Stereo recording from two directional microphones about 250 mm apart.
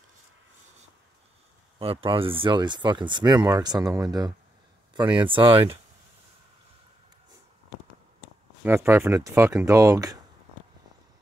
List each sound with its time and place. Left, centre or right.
1.8 s speech: right
8.6 s speech: centre